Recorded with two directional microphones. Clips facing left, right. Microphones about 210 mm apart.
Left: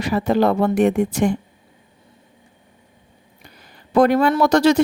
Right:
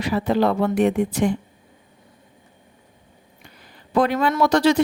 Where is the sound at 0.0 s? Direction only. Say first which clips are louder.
Left 2 dB; 45° left (ahead or behind).